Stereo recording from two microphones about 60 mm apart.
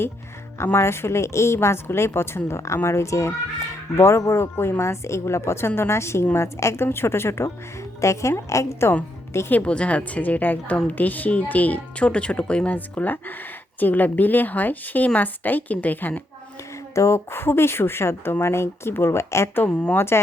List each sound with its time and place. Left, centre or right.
0.6 s a woman's voice: left
9.5 s speech: left
16.9 s a woman's voice: left
19.6 s speech: left
20.0 s a woman's voice: left